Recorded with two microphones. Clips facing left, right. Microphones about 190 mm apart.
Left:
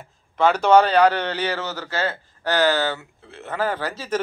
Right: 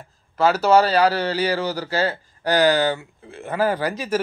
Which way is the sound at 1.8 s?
35° right (ahead or behind).